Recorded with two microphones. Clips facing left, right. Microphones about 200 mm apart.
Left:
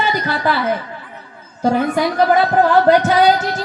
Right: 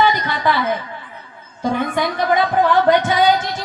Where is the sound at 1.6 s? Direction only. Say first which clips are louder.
Left 4 dB; 40° left (ahead or behind).